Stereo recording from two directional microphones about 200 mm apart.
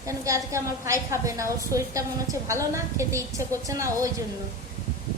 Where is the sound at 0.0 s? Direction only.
15° right (ahead or behind).